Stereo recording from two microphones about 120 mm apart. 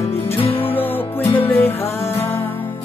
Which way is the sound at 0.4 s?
50° left (ahead or behind).